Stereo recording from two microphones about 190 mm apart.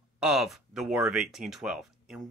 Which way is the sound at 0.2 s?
Centre (ahead or behind).